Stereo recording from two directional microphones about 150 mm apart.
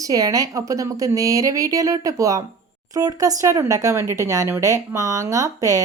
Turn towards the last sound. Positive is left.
turn(degrees=-20)  # may be behind; listen again after turning